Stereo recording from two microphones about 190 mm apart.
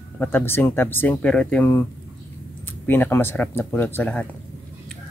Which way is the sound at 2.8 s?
10° left (ahead or behind).